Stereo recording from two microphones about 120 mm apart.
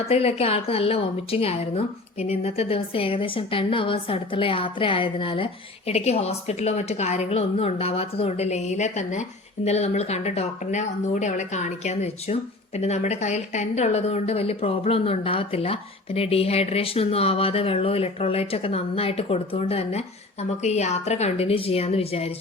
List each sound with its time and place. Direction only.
0.0 s a woman's voice: 55° left (ahead or behind)
5.9 s speech: 60° left (ahead or behind); by 9.2 s 85° left
9.6 s speech: 65° left (ahead or behind)